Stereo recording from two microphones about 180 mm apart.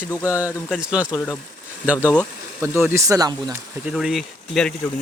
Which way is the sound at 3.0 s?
20° right (ahead or behind).